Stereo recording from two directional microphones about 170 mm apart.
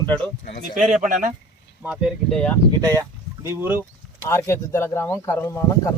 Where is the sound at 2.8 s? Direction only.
15° right (ahead or behind).